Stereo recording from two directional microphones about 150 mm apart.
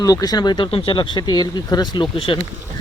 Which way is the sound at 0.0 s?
25° left (ahead or behind).